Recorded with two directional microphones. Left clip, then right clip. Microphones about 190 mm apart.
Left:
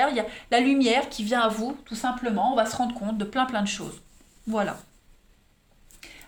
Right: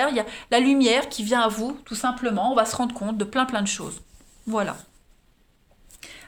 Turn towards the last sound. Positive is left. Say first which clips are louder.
# right 3 dB
turn(degrees=-35)  # may be behind; listen again after turning